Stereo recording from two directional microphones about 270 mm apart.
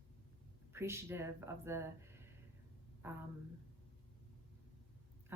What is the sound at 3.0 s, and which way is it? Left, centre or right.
Speech, centre.